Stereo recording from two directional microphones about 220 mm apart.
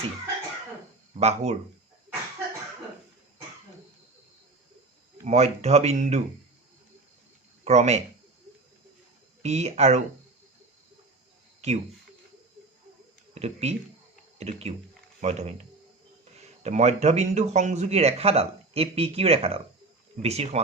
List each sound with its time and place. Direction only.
1.2 s speech: 30° right (ahead or behind)
5.2 s speech: 30° right (ahead or behind)
7.6 s speech: 30° right (ahead or behind)
9.4 s speech: 30° right (ahead or behind)
11.6 s speech: 30° right (ahead or behind)
13.3 s speech: 30° right (ahead or behind)
16.6 s speech: 30° right (ahead or behind)